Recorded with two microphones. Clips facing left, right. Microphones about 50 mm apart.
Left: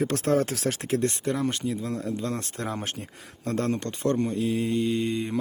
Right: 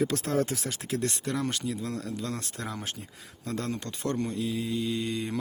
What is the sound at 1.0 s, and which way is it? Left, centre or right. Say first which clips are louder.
Mantra: left 5 dB; left.